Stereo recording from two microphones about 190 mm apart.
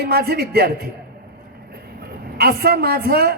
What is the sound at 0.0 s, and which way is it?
Speech, 55° right (ahead or behind).